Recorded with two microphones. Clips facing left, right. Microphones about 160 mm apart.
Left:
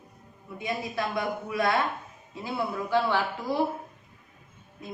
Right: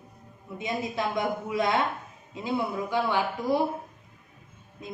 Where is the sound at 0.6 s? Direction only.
20° right (ahead or behind).